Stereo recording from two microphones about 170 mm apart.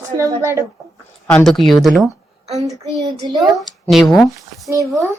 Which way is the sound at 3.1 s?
25° right (ahead or behind).